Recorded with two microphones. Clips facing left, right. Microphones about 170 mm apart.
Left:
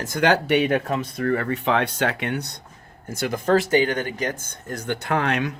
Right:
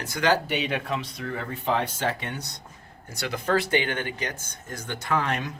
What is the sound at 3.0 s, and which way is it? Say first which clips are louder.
Speech: left 6 dB; 50° left (ahead or behind).